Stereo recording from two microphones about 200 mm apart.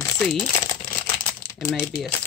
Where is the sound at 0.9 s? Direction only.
10° left (ahead or behind).